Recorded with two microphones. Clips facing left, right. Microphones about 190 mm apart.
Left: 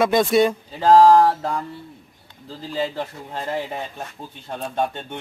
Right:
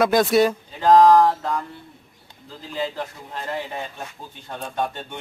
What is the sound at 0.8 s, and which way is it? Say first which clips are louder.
Speech: left 1 dB; 30° left (ahead or behind).